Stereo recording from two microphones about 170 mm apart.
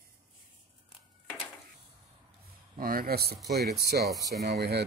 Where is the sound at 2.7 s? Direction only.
60° right (ahead or behind).